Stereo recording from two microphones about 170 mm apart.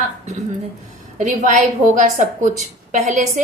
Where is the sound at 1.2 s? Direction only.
50° right (ahead or behind).